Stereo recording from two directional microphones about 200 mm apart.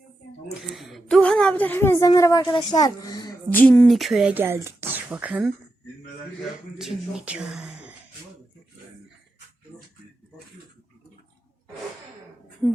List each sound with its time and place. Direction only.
0.7 s a sound: centre (ahead or behind); by 3.3 s 20° left (ahead or behind)
3.5 s speech: 10° left (ahead or behind)
6.7 s speech: 5° right (ahead or behind)